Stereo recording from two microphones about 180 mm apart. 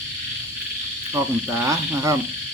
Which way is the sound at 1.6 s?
15° right (ahead or behind).